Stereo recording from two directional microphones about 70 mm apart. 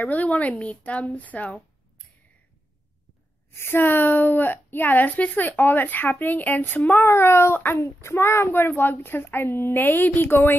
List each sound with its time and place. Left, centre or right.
0.0 s a woman's voice: left
3.5 s a woman's voice: left
7.1 s a child's voice: left